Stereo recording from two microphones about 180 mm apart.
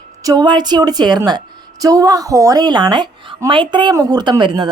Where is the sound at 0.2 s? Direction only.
20° right (ahead or behind).